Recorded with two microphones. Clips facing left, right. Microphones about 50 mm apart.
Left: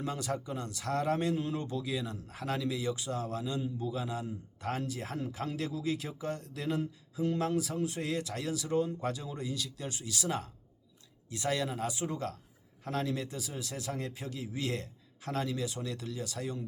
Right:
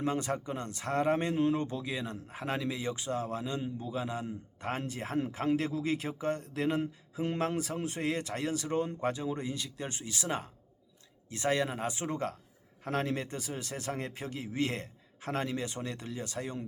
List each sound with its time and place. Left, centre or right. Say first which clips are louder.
0.0 s a man's voice: right 3 dB; right